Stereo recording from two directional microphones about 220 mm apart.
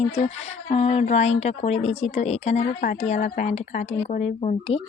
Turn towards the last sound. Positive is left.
turn(degrees=30)  # may be behind; listen again after turning